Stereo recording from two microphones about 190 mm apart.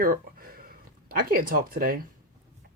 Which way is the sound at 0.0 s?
50° right (ahead or behind).